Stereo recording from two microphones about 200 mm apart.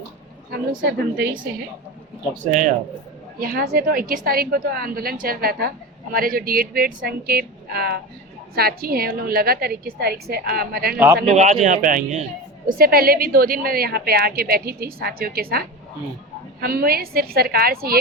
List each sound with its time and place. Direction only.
0.5 s a woman's voice: 50° right (ahead or behind)
10.9 s a man's voice: 10° right (ahead or behind)
11.3 s a woman's voice: 35° right (ahead or behind)